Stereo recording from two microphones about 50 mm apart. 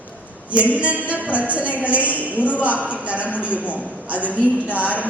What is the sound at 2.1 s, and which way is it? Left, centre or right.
Speech, left.